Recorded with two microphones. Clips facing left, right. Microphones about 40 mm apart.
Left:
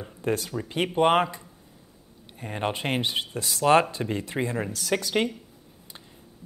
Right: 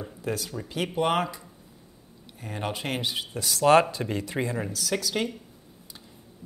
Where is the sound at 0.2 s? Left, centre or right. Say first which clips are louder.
Left 5 dB; left.